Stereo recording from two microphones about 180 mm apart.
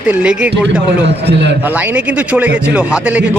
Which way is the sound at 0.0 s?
5° right (ahead or behind).